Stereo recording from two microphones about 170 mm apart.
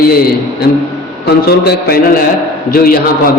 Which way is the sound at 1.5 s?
65° left (ahead or behind).